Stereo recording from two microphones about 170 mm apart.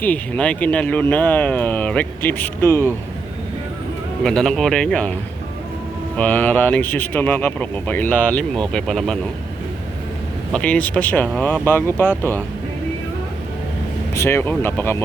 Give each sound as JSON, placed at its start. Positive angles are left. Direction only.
{"t": 0.0, "sound": "speech", "side_deg": 10}
{"t": 4.2, "sound": "speech", "side_deg": 5}
{"t": 6.1, "sound": "speech", "side_deg": 10}
{"t": 10.5, "sound": "speech", "side_deg": 5}
{"t": 14.2, "sound": "speech", "side_deg": 15}